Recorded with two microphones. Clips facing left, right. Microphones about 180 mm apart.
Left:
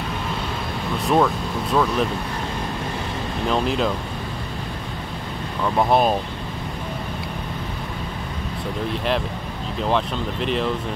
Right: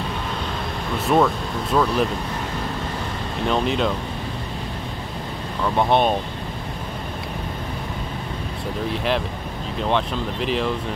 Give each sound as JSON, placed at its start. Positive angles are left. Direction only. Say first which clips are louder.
{"t": 1.0, "sound": "speech", "louder": "right 1 dB", "side_deg": 0}
{"t": 3.4, "sound": "speech", "louder": "even", "side_deg": 0}
{"t": 5.6, "sound": "speech", "louder": "even", "side_deg": 5}
{"t": 8.8, "sound": "speech", "louder": "right 1 dB", "side_deg": 0}